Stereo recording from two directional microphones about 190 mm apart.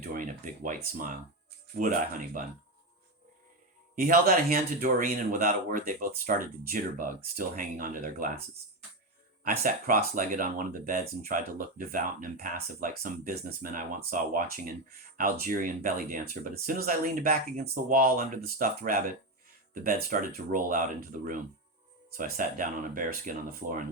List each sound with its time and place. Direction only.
0.0 s speech: 50° right (ahead or behind)
3.9 s speech: 50° right (ahead or behind)
9.4 s speech: 45° right (ahead or behind)